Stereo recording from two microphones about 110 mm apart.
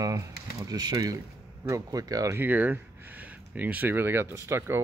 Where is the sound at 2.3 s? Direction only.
15° right (ahead or behind).